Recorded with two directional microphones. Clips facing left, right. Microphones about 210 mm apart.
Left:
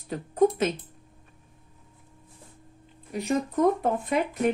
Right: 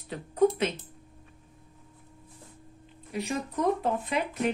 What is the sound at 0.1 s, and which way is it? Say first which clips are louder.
Speech: left 2 dB; 45° left (ahead or behind).